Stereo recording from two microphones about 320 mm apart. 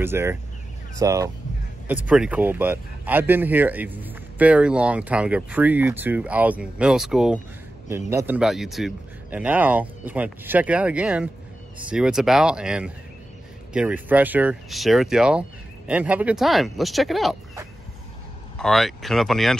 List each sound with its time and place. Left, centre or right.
0.0 s speech: centre